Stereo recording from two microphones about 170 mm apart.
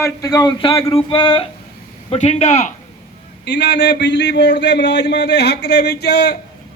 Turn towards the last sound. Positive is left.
turn(degrees=75)  # may be behind; listen again after turning